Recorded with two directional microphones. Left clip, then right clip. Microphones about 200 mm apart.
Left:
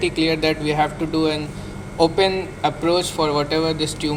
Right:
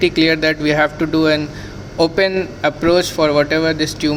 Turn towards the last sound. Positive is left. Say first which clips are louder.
# right 5 dB
turn(degrees=-50)  # may be behind; listen again after turning